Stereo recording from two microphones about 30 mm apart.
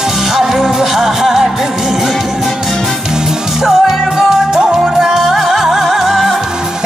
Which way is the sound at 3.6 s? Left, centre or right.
Centre.